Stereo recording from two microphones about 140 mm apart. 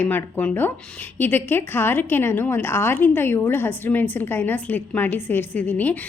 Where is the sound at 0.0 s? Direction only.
15° left (ahead or behind).